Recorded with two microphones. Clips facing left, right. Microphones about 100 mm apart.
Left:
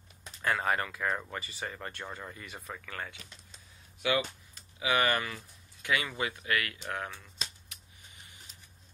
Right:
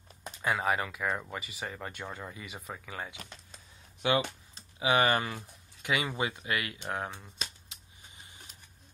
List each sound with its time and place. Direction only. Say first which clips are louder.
0.4 s speech: even; 10° right (ahead or behind)
3.2 s typing: right 5 dB; 50° right (ahead or behind)
4.0 s speech: right 2 dB; 25° right (ahead or behind)
7.7 s cap gun: even; 20° right (ahead or behind)